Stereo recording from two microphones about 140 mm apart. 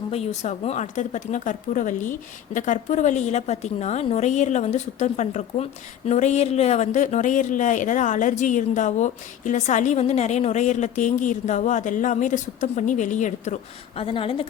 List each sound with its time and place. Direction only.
0.1 s a woman's voice: 50° left (ahead or behind)
14.0 s speech: 40° left (ahead or behind)